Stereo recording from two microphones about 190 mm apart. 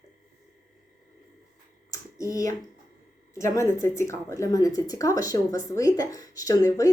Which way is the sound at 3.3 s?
15° left (ahead or behind).